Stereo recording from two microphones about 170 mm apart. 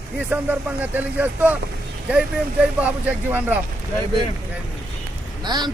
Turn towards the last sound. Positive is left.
turn(degrees=-25)  # may be behind; listen again after turning